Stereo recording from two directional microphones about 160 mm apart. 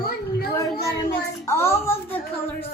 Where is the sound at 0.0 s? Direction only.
70° left (ahead or behind).